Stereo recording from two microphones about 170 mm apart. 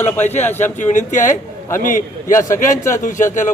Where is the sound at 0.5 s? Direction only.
45° left (ahead or behind).